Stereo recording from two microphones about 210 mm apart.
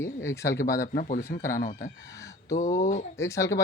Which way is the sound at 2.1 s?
15° left (ahead or behind).